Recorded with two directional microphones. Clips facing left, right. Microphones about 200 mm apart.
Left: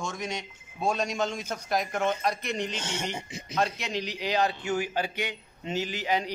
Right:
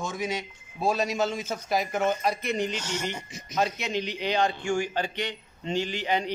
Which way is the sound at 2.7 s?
25° left (ahead or behind).